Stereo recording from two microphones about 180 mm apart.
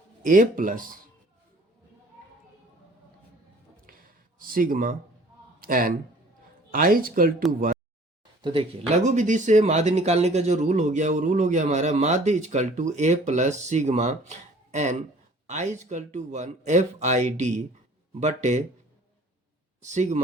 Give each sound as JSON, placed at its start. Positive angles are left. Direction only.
{"t": 0.3, "sound": "speech", "side_deg": -45}
{"t": 3.8, "sound": "a sound", "side_deg": -50}
{"t": 6.7, "sound": "speech", "side_deg": -50}
{"t": 8.4, "sound": "speech", "side_deg": -25}
{"t": 9.0, "sound": "speech", "side_deg": -40}
{"t": 19.8, "sound": "speech", "side_deg": -40}